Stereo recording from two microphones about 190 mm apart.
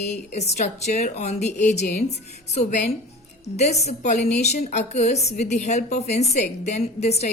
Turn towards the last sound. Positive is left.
turn(degrees=35)  # may be behind; listen again after turning